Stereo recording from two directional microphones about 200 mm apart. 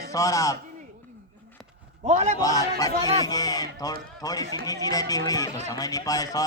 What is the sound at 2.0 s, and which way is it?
Speech, 35° right (ahead or behind).